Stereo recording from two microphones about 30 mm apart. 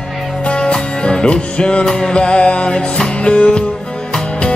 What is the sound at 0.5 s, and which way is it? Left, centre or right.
Music, left.